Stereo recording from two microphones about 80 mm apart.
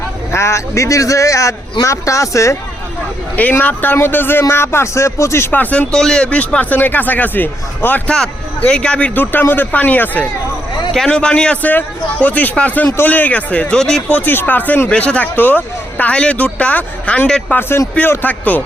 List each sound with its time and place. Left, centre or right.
0.3 s speech: left
3.3 s speech: left
5.5 s speech: left
5.9 s speech: centre
8.1 s speech: centre
10.9 s a man's voice: centre
14.1 s speech: left
17.5 s speech: left